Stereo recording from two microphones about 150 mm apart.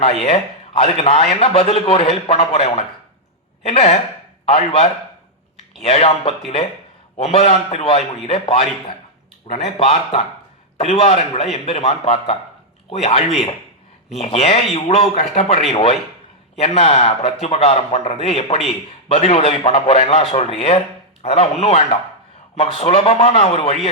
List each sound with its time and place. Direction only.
0.0 s a man's voice: 40° left (ahead or behind)
9.7 s a man's voice: 40° left (ahead or behind)